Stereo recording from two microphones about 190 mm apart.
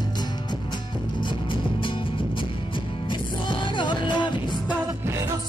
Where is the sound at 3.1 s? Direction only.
25° left (ahead or behind).